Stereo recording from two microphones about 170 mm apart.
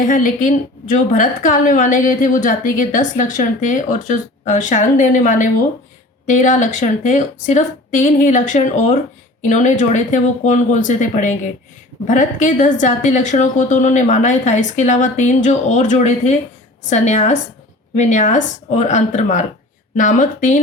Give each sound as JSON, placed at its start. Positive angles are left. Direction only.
{"t": 0.0, "sound": "a woman's voice", "side_deg": 50}